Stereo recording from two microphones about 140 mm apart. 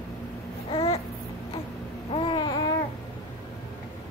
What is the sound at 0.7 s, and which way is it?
Babbling, 45° left (ahead or behind).